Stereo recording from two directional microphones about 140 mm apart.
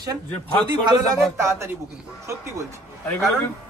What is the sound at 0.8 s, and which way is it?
Speech, 30° right (ahead or behind).